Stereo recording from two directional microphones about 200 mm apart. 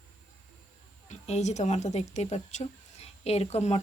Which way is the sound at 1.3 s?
35° left (ahead or behind).